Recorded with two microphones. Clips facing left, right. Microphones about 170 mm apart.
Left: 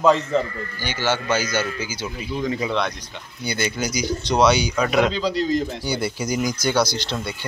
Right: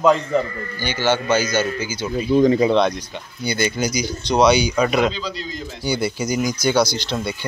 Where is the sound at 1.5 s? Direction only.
25° right (ahead or behind).